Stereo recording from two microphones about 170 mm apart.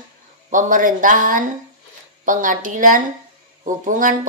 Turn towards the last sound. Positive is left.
turn(degrees=-50)  # may be behind; listen again after turning